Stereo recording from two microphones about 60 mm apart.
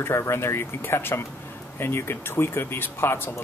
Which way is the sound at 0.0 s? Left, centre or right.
Left.